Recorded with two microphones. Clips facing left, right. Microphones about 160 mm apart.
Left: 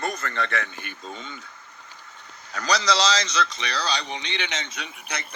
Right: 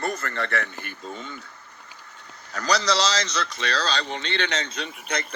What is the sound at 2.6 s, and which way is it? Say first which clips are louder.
A man's voice: even; 15° left (ahead or behind).